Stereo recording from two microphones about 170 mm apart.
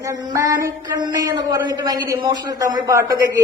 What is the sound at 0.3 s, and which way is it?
A man's voice, 20° right (ahead or behind).